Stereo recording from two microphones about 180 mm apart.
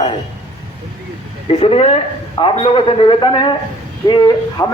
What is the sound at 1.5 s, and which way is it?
A man's voice, 30° left (ahead or behind).